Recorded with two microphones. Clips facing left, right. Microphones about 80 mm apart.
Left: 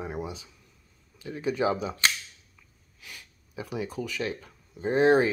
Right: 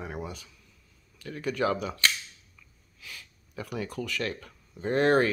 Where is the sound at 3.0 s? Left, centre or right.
Centre.